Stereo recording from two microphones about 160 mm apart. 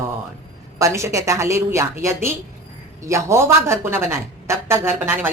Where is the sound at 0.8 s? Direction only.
20° right (ahead or behind).